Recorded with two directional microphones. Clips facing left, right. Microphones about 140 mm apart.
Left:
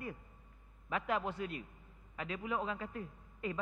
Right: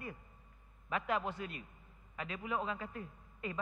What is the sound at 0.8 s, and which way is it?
A man's voice, 20° left (ahead or behind).